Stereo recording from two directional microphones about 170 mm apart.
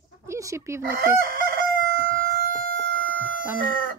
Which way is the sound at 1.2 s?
60° right (ahead or behind).